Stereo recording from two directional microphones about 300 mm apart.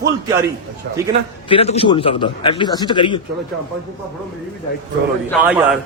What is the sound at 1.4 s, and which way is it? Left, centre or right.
A man's voice, centre.